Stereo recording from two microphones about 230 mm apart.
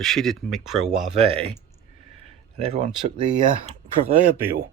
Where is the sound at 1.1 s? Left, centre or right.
Right.